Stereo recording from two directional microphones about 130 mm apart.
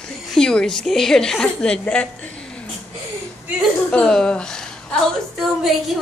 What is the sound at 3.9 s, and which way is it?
A woman's voice, 5° left (ahead or behind).